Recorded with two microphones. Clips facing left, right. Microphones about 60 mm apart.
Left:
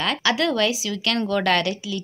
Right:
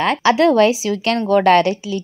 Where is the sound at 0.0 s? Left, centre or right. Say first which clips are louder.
Right 8 dB; right.